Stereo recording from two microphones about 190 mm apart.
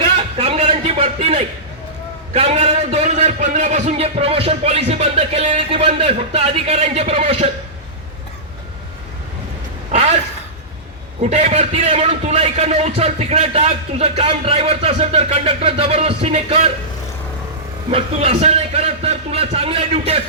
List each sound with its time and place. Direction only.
0.3 s a sound: 30° right (ahead or behind)
2.3 s a man's voice: 35° right (ahead or behind)
11.2 s a man's voice: 35° right (ahead or behind)
17.9 s a man's voice: 30° right (ahead or behind)